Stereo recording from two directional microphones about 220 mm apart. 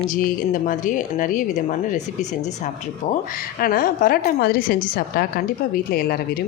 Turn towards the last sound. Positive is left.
turn(degrees=45)  # may be behind; listen again after turning